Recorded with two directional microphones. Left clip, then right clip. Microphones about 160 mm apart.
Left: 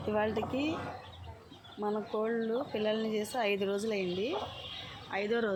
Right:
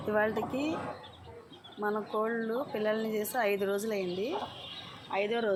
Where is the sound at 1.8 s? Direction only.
20° left (ahead or behind).